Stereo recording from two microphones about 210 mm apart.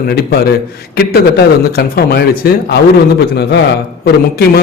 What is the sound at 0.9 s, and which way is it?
Speech, 50° left (ahead or behind).